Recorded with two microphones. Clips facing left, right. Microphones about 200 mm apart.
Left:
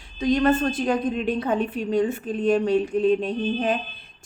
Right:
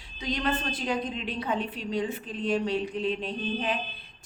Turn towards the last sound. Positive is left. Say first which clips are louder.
# left 7 dB
turn(degrees=45)  # may be behind; listen again after turning